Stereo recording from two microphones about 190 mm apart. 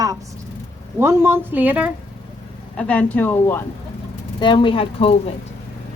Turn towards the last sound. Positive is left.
turn(degrees=30)  # may be behind; listen again after turning